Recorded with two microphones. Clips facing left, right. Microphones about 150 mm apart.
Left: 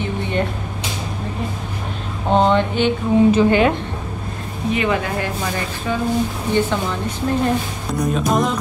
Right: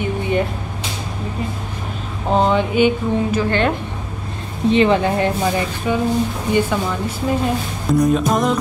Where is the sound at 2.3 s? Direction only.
5° right (ahead or behind).